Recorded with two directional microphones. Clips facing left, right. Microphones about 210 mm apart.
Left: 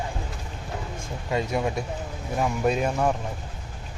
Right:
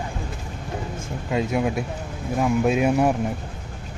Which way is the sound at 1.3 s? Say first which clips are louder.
Right 3 dB; 5° right (ahead or behind).